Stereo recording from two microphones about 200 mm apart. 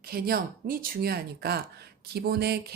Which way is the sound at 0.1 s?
50° right (ahead or behind).